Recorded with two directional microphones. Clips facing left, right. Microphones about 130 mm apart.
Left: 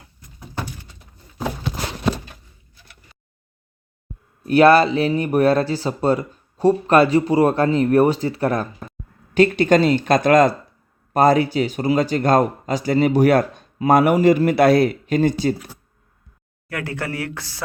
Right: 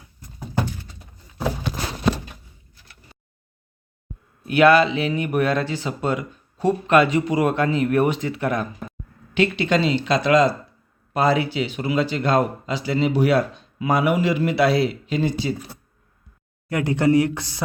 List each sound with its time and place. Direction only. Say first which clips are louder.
4.4 s speech: left 2 dB; 40° left (ahead or behind)
16.6 s speech: right 8 dB; 20° right (ahead or behind)